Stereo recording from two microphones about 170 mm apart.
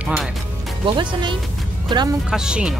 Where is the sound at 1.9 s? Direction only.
25° right (ahead or behind).